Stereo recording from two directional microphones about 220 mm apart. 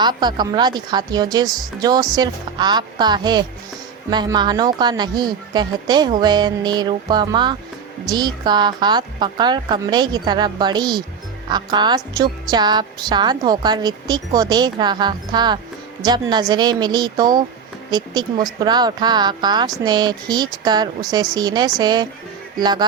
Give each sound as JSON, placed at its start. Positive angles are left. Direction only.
{"t": 0.0, "sound": "a woman's voice", "side_deg": -20}